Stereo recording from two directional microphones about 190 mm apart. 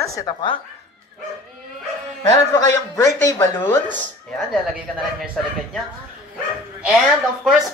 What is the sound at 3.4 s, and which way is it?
Speech, 10° left (ahead or behind).